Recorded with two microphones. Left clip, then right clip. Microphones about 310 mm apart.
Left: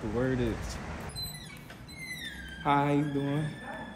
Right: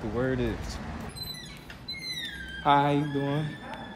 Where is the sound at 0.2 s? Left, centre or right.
Centre.